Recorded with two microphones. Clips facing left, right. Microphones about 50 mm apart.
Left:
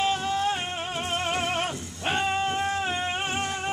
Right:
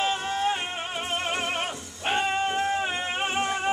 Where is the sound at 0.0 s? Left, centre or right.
Centre.